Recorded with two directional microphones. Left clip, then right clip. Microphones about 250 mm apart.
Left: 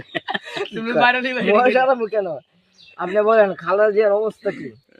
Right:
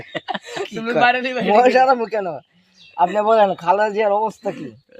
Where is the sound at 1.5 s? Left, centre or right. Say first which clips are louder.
Right 2 dB; right.